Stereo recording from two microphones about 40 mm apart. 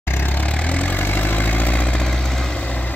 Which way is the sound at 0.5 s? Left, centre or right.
Left.